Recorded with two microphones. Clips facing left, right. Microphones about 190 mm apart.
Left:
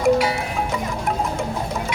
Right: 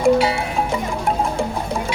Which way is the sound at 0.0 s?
25° right (ahead or behind).